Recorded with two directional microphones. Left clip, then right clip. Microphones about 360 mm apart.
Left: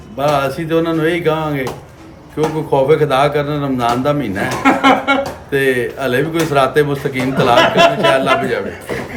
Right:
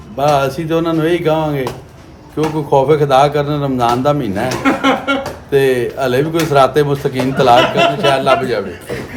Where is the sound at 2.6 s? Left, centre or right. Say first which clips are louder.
Right 1 dB; centre.